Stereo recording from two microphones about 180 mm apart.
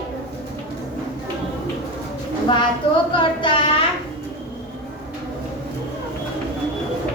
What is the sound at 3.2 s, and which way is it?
Child singing, 30° left (ahead or behind).